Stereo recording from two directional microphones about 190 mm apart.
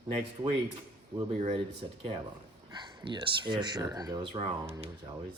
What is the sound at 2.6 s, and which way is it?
Speech, 20° right (ahead or behind).